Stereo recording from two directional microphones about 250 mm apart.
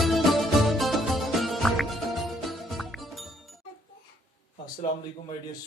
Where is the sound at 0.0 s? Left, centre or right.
Centre.